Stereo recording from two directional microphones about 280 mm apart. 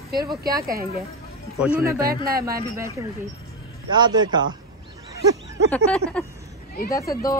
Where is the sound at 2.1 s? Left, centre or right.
Right.